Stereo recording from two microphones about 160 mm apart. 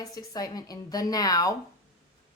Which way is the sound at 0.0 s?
25° left (ahead or behind).